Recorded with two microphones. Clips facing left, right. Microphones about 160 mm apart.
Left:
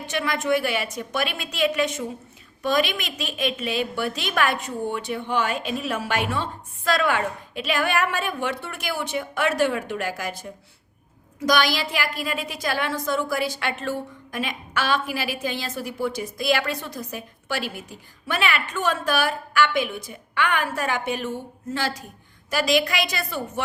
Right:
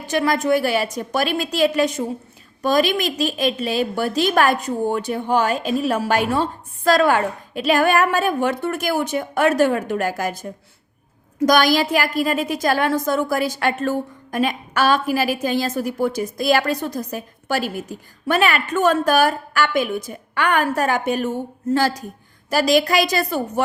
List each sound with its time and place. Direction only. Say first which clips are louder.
0.0 s a woman's voice: right 6 dB; 40° right (ahead or behind)